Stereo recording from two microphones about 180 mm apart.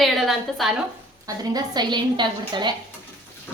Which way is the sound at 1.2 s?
20° right (ahead or behind).